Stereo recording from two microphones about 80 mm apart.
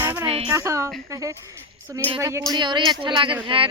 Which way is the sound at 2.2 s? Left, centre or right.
Right.